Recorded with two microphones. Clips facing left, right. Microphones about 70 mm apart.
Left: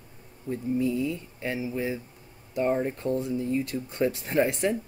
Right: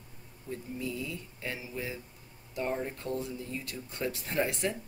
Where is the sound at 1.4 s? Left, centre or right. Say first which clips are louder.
Left 9 dB; left.